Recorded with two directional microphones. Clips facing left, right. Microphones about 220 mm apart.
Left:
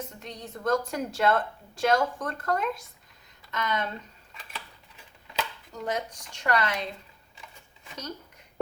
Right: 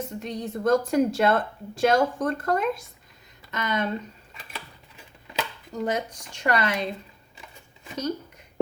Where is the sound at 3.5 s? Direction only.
5° right (ahead or behind).